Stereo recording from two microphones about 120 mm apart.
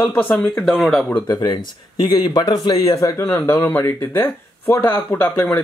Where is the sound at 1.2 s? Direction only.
35° left (ahead or behind).